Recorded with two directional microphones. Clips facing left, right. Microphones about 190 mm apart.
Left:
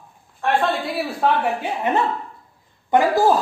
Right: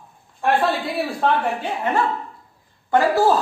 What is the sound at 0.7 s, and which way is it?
Speech, centre (ahead or behind).